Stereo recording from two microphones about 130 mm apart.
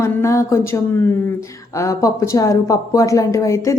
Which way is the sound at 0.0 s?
20° left (ahead or behind).